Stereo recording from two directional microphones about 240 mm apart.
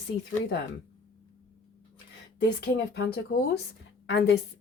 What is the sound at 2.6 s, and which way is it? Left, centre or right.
Speech, left.